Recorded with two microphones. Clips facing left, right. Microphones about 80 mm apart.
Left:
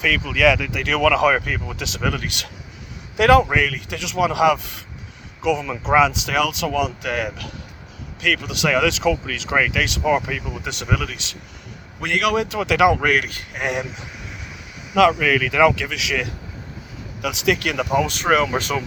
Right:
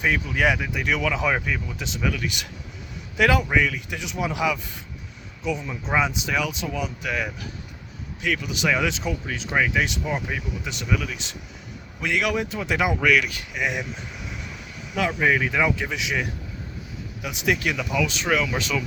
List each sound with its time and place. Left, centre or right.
0.0 s speech: left
5.4 s speech: left
11.9 s a man's voice: left
14.9 s speech: left
17.2 s speech: left